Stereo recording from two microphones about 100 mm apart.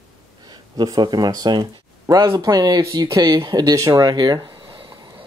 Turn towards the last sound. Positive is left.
turn(degrees=-45)  # may be behind; listen again after turning